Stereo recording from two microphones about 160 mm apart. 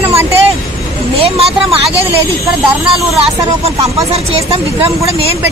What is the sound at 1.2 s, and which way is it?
Speech, 40° right (ahead or behind).